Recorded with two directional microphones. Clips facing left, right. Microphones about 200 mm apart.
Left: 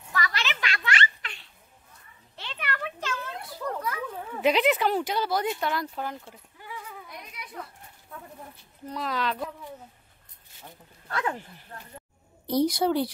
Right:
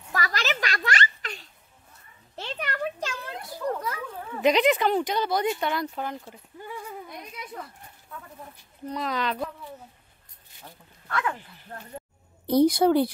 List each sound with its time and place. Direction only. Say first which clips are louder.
0.1 s a sound: right 3 dB; 40° right (ahead or behind)
3.1 s children playing: left 1 dB; 25° right (ahead or behind)
4.4 s speech: right 2 dB; 5° left (ahead or behind)
8.8 s speech: right 1 dB; centre (ahead or behind)
11.1 s speech: right 1 dB; 35° left (ahead or behind)
12.4 s a woman's voice: right 5 dB; 55° right (ahead or behind)